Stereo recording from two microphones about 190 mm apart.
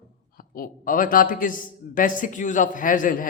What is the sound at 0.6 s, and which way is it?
A man's voice, 45° left (ahead or behind).